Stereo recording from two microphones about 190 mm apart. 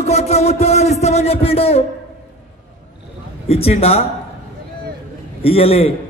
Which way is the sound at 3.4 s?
30° left (ahead or behind).